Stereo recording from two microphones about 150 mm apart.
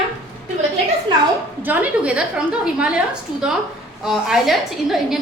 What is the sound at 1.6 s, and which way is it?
A woman's voice, 10° right (ahead or behind).